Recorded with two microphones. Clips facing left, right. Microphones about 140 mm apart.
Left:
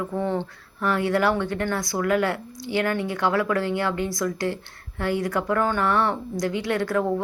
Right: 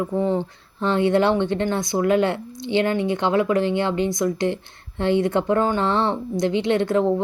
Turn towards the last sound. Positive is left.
turn(degrees=-20)  # may be behind; listen again after turning